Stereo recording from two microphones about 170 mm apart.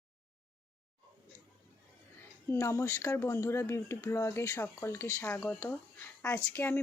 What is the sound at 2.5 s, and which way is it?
A woman's voice, 15° left (ahead or behind).